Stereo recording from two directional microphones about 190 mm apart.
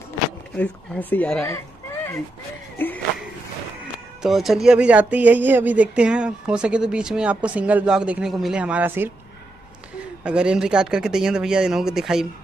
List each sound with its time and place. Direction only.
0.6 s speech: 10° left (ahead or behind)
4.2 s speech: centre (ahead or behind)
10.2 s speech: 5° right (ahead or behind)